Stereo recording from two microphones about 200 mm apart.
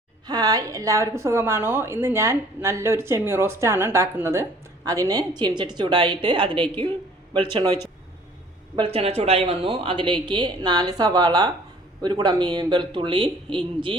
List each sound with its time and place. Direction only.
0.3 s a woman's voice: 20° right (ahead or behind)
8.7 s speech: 30° right (ahead or behind)